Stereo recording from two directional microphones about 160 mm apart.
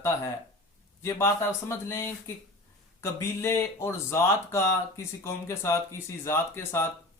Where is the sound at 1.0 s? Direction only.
15° left (ahead or behind).